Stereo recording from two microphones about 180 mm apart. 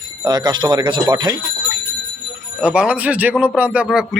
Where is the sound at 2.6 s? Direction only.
5° right (ahead or behind).